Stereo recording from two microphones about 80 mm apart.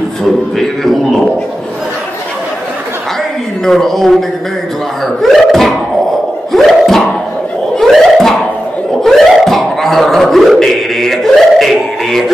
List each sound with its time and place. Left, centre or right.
3.6 s speech: centre
6.5 s music: centre
7.7 s a sound: centre